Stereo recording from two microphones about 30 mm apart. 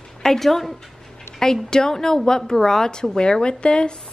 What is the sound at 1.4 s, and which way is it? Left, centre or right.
Speech, centre.